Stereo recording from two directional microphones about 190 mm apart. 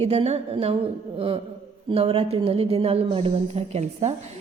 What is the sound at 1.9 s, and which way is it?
A woman's voice, 30° right (ahead or behind).